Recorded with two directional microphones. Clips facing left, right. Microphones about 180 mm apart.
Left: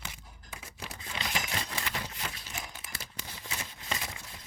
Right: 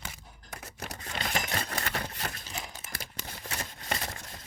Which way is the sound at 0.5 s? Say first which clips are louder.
Right 3 dB; 55° right (ahead or behind).